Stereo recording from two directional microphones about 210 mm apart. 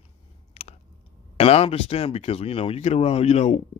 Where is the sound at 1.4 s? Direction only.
30° left (ahead or behind).